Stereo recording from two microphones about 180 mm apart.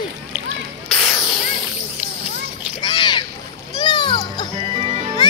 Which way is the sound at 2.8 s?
25° left (ahead or behind).